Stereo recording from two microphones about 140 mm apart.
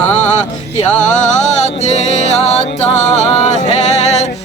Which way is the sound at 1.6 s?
55° left (ahead or behind).